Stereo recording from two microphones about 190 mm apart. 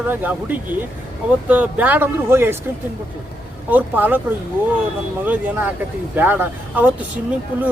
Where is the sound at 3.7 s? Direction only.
10° right (ahead or behind).